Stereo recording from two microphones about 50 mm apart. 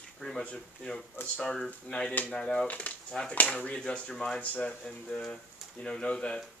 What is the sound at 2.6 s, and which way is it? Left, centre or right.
Speech, left.